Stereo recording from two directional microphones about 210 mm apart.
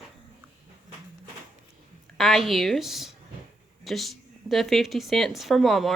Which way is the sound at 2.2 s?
Centre (ahead or behind).